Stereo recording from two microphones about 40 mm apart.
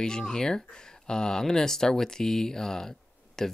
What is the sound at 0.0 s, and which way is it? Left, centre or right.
Speech, centre.